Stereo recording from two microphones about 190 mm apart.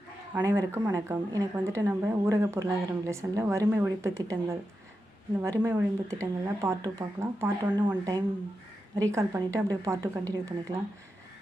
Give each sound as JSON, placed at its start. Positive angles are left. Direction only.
{"t": 0.3, "sound": "speech", "side_deg": -15}